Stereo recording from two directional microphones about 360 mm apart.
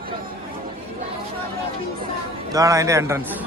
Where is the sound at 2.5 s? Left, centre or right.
Centre.